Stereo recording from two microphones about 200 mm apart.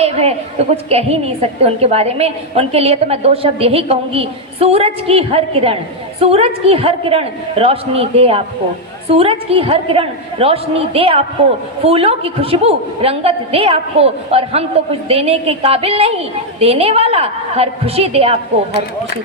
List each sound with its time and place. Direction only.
0.0 s a woman's voice: 30° right (ahead or behind)